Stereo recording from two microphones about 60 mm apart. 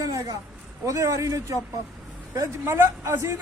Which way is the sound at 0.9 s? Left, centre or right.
Right.